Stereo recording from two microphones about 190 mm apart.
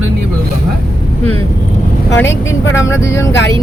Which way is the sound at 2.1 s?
15° left (ahead or behind).